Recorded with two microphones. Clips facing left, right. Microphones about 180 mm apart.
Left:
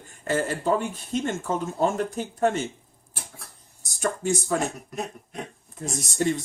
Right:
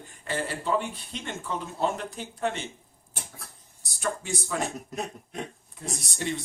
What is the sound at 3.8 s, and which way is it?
Speech, 45° left (ahead or behind).